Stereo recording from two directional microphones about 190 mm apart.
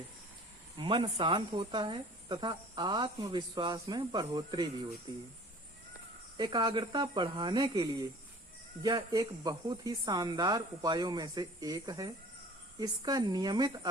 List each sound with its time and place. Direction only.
0.8 s speech: 25° right (ahead or behind)
6.3 s speech: 25° right (ahead or behind)